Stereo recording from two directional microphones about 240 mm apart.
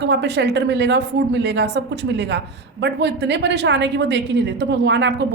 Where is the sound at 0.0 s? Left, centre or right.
Right.